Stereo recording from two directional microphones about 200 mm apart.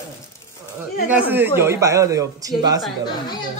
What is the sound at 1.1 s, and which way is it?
Speech, 10° right (ahead or behind).